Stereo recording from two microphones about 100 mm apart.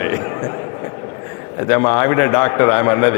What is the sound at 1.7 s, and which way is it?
Speech, 25° left (ahead or behind).